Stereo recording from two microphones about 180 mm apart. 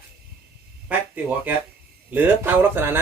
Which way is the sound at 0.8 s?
10° right (ahead or behind).